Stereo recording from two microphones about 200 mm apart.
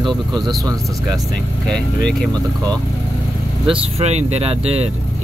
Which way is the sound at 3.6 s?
30° right (ahead or behind).